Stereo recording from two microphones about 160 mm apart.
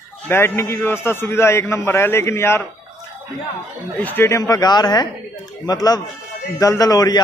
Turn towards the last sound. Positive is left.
turn(degrees=25)  # may be behind; listen again after turning